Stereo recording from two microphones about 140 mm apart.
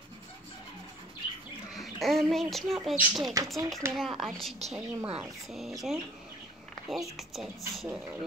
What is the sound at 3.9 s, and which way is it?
Speech, centre (ahead or behind).